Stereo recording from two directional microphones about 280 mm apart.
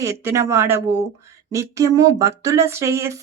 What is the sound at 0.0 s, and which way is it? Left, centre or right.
Speech, centre.